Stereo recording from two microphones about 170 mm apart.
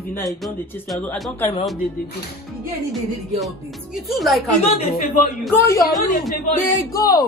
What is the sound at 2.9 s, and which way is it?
Music, centre (ahead or behind).